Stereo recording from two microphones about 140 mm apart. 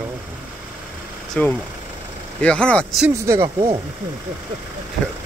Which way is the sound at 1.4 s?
10° left (ahead or behind).